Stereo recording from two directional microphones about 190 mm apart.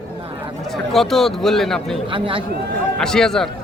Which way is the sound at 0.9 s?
Centre (ahead or behind).